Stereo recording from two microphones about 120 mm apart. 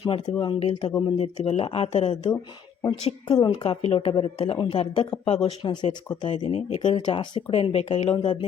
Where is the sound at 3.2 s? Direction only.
40° left (ahead or behind); by 8.0 s 55° left (ahead or behind).